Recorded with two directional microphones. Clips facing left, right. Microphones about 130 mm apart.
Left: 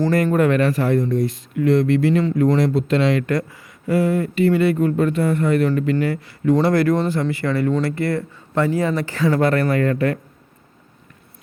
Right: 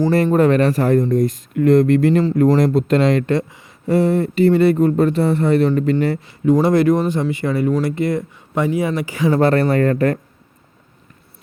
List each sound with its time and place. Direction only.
0.3 s speech: 35° right (ahead or behind)
3.2 s speech: 25° right (ahead or behind)
3.8 s speech: 35° right (ahead or behind)
6.2 s speech: 20° right (ahead or behind)
9.4 s speech: 30° right (ahead or behind)